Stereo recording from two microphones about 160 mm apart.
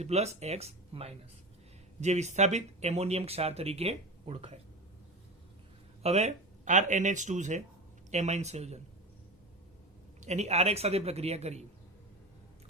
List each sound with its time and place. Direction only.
0.0 s speech: 40° right (ahead or behind)
6.0 s speech: 40° right (ahead or behind)
10.2 s speech: 45° right (ahead or behind)